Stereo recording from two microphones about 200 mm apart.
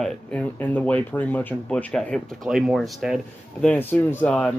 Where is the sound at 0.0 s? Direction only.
5° left (ahead or behind).